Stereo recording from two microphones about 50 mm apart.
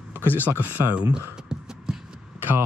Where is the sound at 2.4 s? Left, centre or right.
Right.